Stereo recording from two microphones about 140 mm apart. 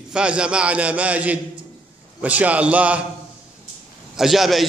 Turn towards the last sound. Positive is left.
turn(degrees=0)  # may be behind; listen again after turning